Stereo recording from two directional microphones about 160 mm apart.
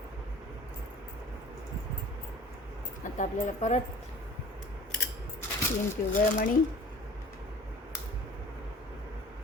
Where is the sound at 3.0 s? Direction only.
50° left (ahead or behind).